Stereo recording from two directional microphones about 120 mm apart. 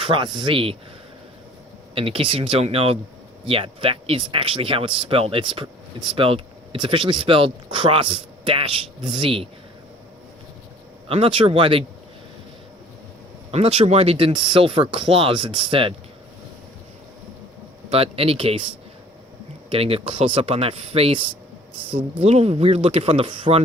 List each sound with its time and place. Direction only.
0.0 s speech: 45° right (ahead or behind)
2.0 s speech: 50° right (ahead or behind)
11.1 s speech: 50° right (ahead or behind)
13.5 s speech: 55° right (ahead or behind)
17.9 s speech: 55° right (ahead or behind)
19.7 s speech: 50° right (ahead or behind)